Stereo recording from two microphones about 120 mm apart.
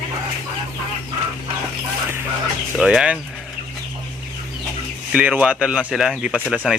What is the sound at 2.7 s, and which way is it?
Speech, 5° right (ahead or behind).